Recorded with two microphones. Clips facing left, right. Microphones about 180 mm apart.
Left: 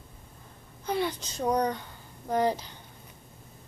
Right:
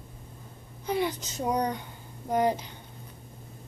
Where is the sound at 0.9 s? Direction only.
15° right (ahead or behind).